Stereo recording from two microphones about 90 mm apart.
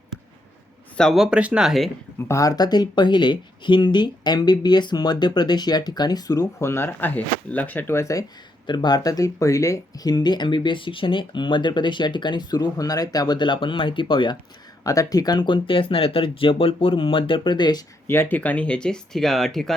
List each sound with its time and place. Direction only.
1.1 s speech: 5° right (ahead or behind)
2.2 s speech: 35° left (ahead or behind)
6.6 s speech: 30° left (ahead or behind)
8.6 s speech: 55° left (ahead or behind)
14.8 s speech: 40° left (ahead or behind)
18.1 s speech: 20° left (ahead or behind); by 19.7 s 5° left (ahead or behind)